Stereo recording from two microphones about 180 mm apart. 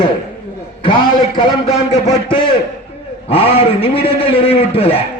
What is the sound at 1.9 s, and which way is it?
A man's voice, 40° left (ahead or behind).